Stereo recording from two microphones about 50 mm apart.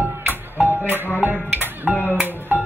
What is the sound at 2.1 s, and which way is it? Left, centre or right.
Music, right.